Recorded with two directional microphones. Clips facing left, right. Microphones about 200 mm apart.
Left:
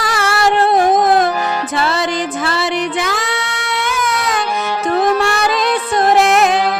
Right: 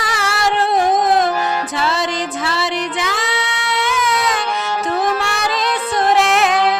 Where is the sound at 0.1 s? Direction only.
60° left (ahead or behind).